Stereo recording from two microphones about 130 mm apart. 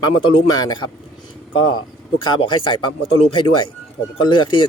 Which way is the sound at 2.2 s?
35° left (ahead or behind).